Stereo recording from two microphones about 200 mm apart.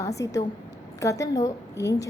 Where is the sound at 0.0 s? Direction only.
15° left (ahead or behind).